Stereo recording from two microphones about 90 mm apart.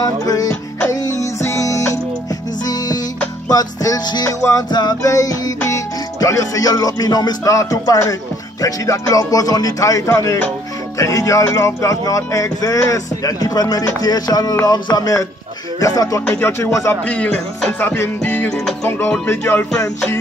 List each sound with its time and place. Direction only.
0.0 s music: 45° left (ahead or behind)
0.5 s music: 35° left (ahead or behind)
2.6 s music: 45° left (ahead or behind)
4.6 s music: 55° left (ahead or behind)
5.0 s music: 40° left (ahead or behind)
16.3 s music: 25° left (ahead or behind)
17.0 s music: 15° left (ahead or behind)